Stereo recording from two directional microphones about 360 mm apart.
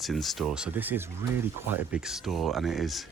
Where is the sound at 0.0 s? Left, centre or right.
Centre.